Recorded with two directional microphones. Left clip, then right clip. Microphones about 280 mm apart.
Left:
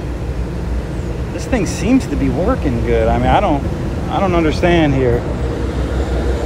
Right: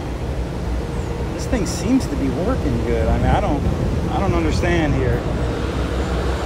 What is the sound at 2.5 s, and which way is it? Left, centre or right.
Speech, centre.